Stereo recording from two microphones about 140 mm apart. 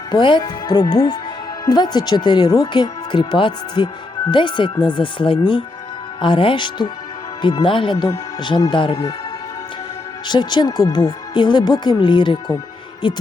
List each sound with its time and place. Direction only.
0.1 s speech: 35° left (ahead or behind)
10.2 s speech: 30° left (ahead or behind)